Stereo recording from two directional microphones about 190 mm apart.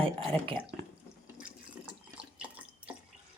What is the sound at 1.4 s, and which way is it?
Water, 5° right (ahead or behind).